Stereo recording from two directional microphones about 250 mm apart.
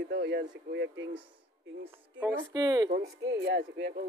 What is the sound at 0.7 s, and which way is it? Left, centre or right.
Speech, right.